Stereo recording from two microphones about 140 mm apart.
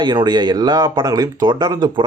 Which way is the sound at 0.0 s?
30° right (ahead or behind).